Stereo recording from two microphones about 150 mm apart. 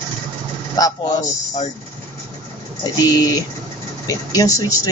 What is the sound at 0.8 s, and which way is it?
Speech, 25° left (ahead or behind).